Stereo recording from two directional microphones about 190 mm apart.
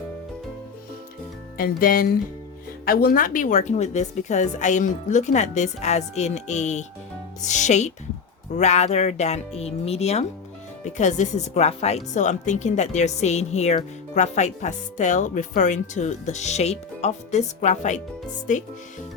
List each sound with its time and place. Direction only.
1.5 s speech: 50° left (ahead or behind)